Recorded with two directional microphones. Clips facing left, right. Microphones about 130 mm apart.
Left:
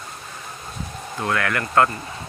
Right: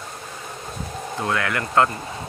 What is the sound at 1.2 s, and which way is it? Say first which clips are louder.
Speech: left 1 dB; 20° right (ahead or behind).